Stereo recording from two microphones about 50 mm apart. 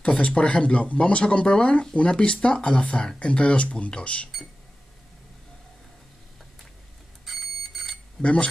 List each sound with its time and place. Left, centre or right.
0.2 s speech: centre
7.2 s alarm clock: centre
8.2 s speech: left